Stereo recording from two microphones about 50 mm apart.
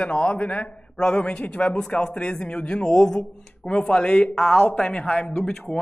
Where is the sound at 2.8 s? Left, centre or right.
Centre.